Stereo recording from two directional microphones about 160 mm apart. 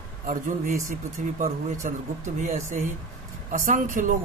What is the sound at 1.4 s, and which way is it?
Speech, 50° right (ahead or behind).